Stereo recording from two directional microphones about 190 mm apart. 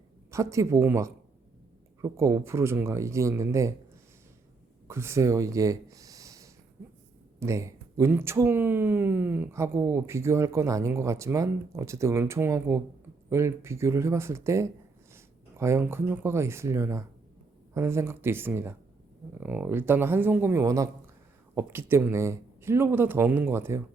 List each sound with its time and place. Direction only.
0.3 s speech: 15° right (ahead or behind)
4.9 s speech: 15° right (ahead or behind)